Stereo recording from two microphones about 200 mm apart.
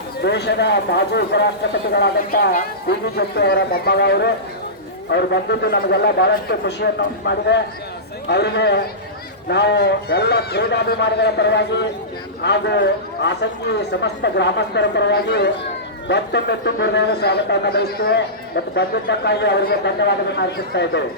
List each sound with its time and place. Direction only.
0.2 s speech: 55° left (ahead or behind)